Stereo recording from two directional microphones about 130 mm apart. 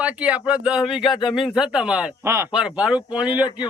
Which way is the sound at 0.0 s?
10° right (ahead or behind).